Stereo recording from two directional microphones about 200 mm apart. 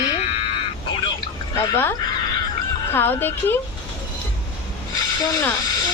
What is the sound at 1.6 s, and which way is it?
Speech, 10° left (ahead or behind).